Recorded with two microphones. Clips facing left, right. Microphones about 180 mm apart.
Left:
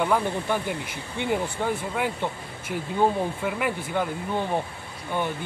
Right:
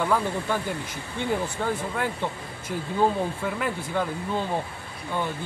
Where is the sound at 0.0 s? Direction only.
15° left (ahead or behind).